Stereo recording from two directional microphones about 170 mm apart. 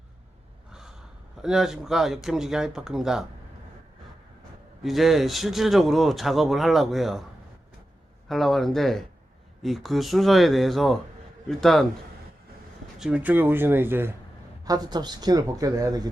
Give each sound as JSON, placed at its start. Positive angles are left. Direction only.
{"t": 0.7, "sound": "gasp", "side_deg": -5}
{"t": 1.4, "sound": "speech", "side_deg": -5}
{"t": 4.8, "sound": "speech", "side_deg": 0}
{"t": 8.3, "sound": "speech", "side_deg": 0}
{"t": 13.0, "sound": "speech", "side_deg": -5}